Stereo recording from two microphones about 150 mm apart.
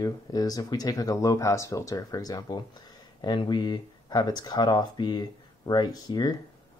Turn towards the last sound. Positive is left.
turn(degrees=25)  # may be behind; listen again after turning